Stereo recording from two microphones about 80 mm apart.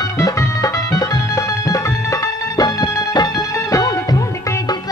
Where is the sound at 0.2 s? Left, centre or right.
Left.